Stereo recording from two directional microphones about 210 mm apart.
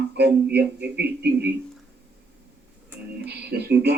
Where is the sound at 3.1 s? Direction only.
55° right (ahead or behind).